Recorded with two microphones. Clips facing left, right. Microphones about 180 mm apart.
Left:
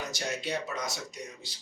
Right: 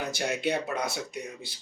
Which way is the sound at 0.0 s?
60° right (ahead or behind).